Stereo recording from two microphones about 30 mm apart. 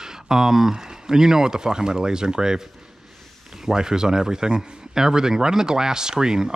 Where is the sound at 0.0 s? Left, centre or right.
Centre.